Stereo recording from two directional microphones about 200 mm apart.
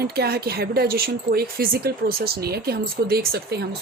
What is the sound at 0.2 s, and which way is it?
Speech, 50° right (ahead or behind).